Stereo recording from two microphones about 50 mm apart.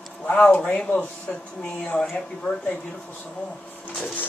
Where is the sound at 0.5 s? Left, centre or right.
Left.